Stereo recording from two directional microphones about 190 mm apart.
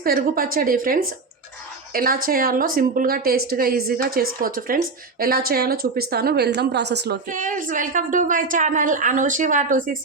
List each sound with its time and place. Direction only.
0.0 s a woman's voice: 50° right (ahead or behind)
7.3 s a woman's voice: 45° right (ahead or behind)